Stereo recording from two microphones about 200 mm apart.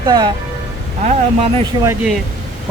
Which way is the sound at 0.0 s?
20° right (ahead or behind).